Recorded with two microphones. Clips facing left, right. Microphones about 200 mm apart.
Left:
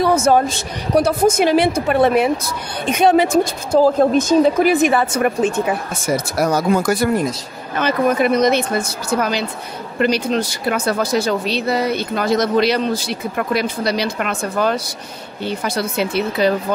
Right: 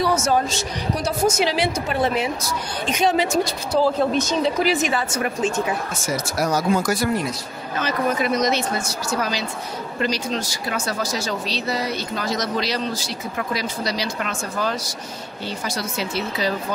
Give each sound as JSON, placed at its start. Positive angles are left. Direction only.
{"t": 0.0, "sound": "speech", "side_deg": 55}
{"t": 3.8, "sound": "a woman's voice", "side_deg": 45}